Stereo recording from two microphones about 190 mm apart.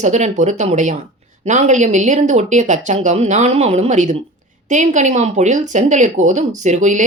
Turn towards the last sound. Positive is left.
turn(degrees=-40)  # may be behind; listen again after turning